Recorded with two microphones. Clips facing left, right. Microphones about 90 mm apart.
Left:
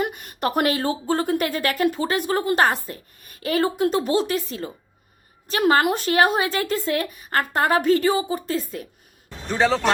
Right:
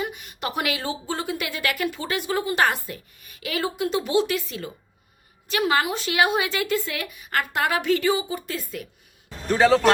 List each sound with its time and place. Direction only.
0.0 s a woman's voice: 50° left (ahead or behind)
5.8 s a woman's voice: 50° left (ahead or behind); by 8.9 s 35° left (ahead or behind)
9.3 s a man's voice: centre (ahead or behind)